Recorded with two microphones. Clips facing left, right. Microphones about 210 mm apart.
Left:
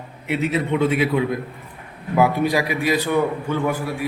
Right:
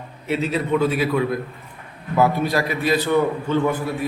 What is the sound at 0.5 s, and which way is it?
A man's voice, 20° left (ahead or behind).